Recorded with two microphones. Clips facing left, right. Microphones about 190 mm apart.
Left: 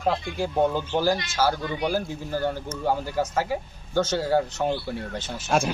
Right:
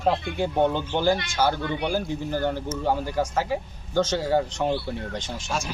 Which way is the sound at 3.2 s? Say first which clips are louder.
Even; 10° left (ahead or behind).